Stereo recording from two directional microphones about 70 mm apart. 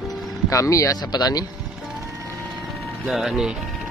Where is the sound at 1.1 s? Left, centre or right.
Left.